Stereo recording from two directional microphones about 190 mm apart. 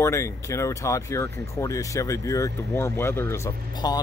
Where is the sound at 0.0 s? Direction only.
15° left (ahead or behind).